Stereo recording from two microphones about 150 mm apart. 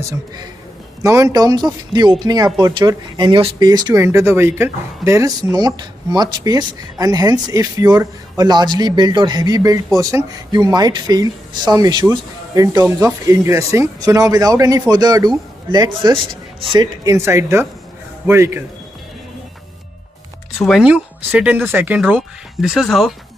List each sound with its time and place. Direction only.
0.0 s speech: 25° right (ahead or behind)
20.5 s speech: centre (ahead or behind)